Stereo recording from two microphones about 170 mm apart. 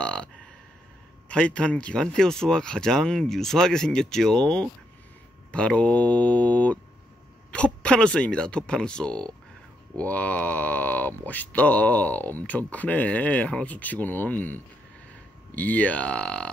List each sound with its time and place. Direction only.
0.0 s speech: 5° left (ahead or behind)
1.3 s speech: 5° left (ahead or behind)